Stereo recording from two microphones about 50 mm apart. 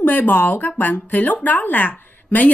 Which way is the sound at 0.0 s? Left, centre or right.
Left.